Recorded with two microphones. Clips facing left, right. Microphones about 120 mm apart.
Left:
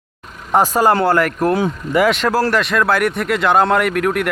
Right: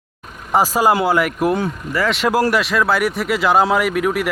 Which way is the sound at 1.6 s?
15° left (ahead or behind).